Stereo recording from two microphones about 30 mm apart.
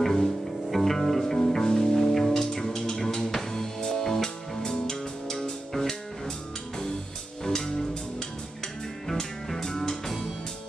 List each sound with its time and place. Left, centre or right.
0.0 s music: centre
1.4 s music: left
2.5 s music: left
4.6 s music: left
5.4 s music: centre
7.4 s music: centre
9.0 s music: centre
10.0 s music: centre